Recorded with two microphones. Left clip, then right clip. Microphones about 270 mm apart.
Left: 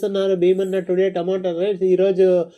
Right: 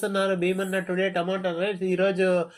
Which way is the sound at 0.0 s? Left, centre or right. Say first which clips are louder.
Left 6 dB; centre.